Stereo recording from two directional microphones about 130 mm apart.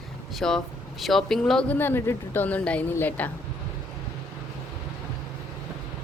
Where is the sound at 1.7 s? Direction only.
15° left (ahead or behind).